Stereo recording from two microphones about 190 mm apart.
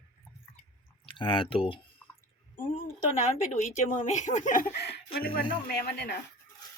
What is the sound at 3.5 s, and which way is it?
Speech, 40° left (ahead or behind).